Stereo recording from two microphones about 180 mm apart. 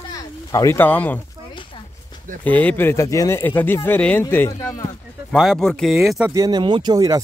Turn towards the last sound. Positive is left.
turn(degrees=-20)  # may be behind; listen again after turning